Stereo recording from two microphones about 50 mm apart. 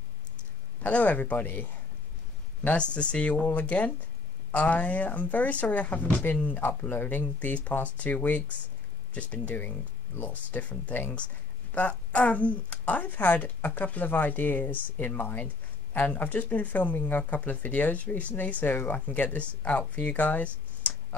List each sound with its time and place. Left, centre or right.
0.4 s speech: left
2.6 s speech: left
20.0 s a sound: left